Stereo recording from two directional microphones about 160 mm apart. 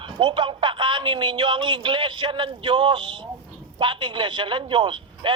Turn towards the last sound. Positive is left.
turn(degrees=-30)  # may be behind; listen again after turning